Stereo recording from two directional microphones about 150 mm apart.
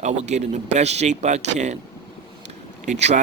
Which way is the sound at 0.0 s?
50° right (ahead or behind).